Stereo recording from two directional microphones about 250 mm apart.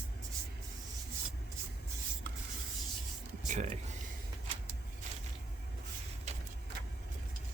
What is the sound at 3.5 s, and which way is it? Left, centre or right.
Speech, right.